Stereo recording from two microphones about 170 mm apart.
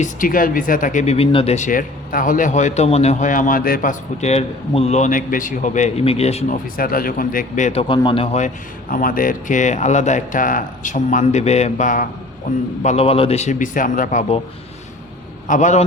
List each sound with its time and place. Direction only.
0.0 s speech: 55° left (ahead or behind)
4.2 s a man's voice: 40° left (ahead or behind)
6.7 s speech: 60° left (ahead or behind); by 14.4 s 40° left (ahead or behind)
15.4 s speech: 45° left (ahead or behind)